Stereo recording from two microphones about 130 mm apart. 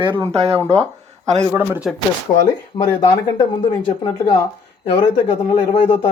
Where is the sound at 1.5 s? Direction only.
10° right (ahead or behind).